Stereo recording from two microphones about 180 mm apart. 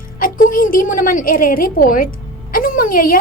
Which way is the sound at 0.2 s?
50° left (ahead or behind).